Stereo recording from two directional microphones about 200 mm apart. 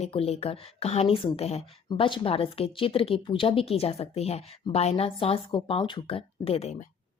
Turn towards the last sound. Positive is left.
turn(degrees=35)  # may be behind; listen again after turning